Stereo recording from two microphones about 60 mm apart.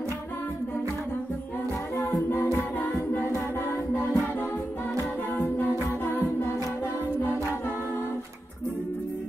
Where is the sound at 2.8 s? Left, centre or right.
Left.